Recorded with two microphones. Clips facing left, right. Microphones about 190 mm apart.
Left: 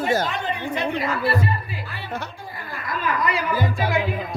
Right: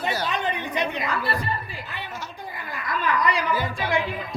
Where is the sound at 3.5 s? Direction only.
45° left (ahead or behind).